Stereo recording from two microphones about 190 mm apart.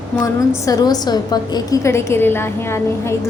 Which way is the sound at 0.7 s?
20° left (ahead or behind).